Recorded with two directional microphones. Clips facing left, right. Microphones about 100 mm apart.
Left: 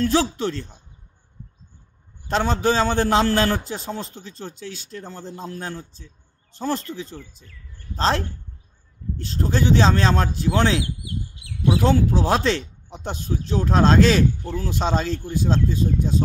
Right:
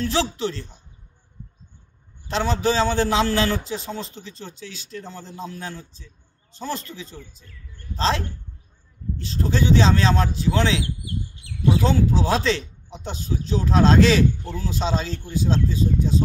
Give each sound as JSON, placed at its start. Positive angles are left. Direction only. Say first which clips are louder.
{"t": 0.0, "sound": "speech", "louder": "left 3 dB", "side_deg": 45}
{"t": 2.2, "sound": "speech", "louder": "left 1 dB", "side_deg": 45}
{"t": 9.2, "sound": "speech", "louder": "left 1 dB", "side_deg": 45}
{"t": 11.8, "sound": "speech", "louder": "left 1 dB", "side_deg": 45}